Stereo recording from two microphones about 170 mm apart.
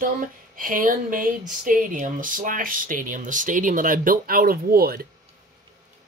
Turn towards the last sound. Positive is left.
turn(degrees=-60)  # may be behind; listen again after turning